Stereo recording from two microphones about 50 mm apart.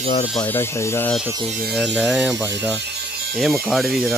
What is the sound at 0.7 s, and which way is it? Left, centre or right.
Speech, left.